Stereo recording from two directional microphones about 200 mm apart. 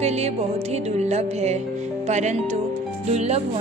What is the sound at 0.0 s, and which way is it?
A woman's voice, 35° right (ahead or behind).